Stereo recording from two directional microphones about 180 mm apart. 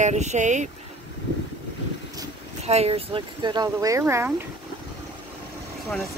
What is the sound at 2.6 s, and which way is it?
Speech, 35° right (ahead or behind).